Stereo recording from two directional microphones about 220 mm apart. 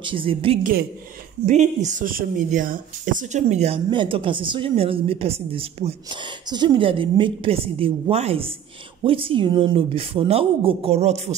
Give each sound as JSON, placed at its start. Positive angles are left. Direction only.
{"t": 0.0, "sound": "speech", "side_deg": -25}